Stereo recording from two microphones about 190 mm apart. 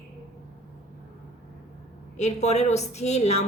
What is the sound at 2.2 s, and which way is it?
A woman's voice, 35° left (ahead or behind).